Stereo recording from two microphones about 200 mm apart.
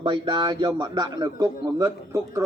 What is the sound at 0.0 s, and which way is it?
A man's voice, 20° right (ahead or behind).